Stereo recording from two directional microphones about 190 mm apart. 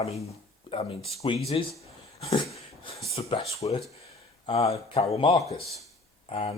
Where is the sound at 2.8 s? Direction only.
30° left (ahead or behind).